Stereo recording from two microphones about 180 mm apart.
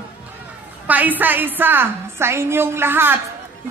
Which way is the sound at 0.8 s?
10° right (ahead or behind).